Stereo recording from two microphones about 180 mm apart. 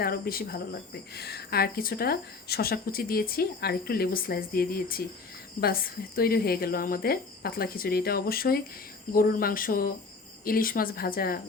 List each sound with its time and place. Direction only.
0.0 s speech: 55° left (ahead or behind)